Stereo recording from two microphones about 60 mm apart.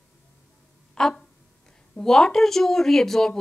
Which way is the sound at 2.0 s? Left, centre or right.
Centre.